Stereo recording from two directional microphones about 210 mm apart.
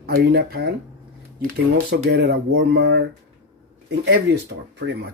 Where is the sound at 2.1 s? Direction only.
50° right (ahead or behind).